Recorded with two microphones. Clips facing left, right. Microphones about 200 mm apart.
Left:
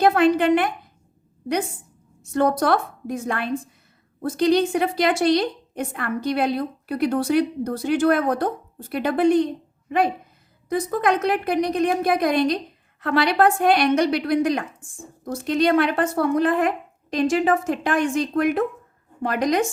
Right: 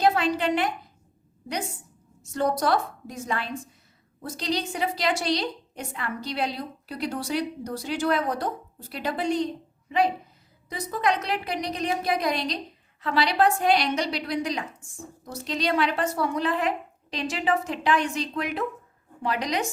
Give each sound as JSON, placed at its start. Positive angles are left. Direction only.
{"t": 0.0, "sound": "a woman's voice", "side_deg": 55}
{"t": 2.3, "sound": "a woman's voice", "side_deg": 55}